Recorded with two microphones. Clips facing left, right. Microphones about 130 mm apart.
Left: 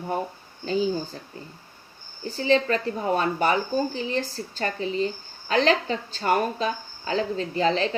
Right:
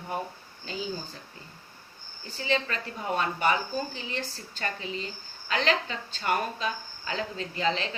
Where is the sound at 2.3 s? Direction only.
35° left (ahead or behind).